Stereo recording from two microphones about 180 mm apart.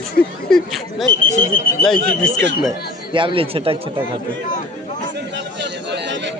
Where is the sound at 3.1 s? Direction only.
30° right (ahead or behind).